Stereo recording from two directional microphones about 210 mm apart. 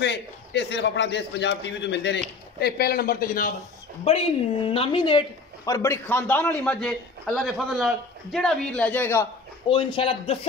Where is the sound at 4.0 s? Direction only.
30° left (ahead or behind); by 9.3 s 10° left (ahead or behind).